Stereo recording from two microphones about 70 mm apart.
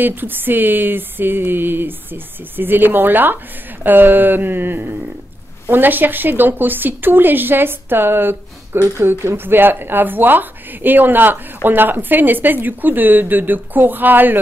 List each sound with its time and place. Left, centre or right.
0.0 s speech: right